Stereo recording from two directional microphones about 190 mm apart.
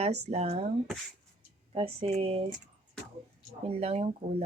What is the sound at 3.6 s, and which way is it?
Speech, 30° right (ahead or behind).